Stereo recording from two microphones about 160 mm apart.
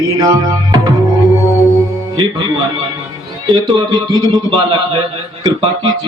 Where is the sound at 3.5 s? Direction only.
30° right (ahead or behind).